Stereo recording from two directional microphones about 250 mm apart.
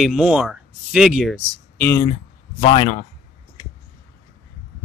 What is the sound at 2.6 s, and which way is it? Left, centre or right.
Speech, left.